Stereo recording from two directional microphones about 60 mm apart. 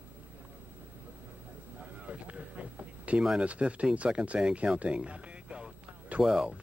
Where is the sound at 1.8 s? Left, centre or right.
Centre.